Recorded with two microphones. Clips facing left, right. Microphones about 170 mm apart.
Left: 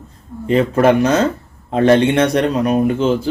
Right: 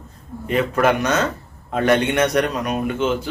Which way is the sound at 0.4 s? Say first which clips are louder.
Left 5 dB; 30° left (ahead or behind).